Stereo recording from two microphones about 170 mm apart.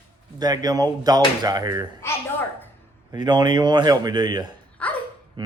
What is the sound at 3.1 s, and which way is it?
Speech, 25° right (ahead or behind).